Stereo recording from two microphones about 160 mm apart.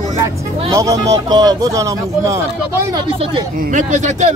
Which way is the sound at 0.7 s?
20° right (ahead or behind).